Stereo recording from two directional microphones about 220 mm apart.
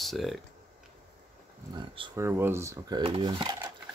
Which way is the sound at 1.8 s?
15° right (ahead or behind).